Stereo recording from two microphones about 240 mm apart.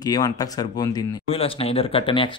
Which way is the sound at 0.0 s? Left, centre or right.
Centre.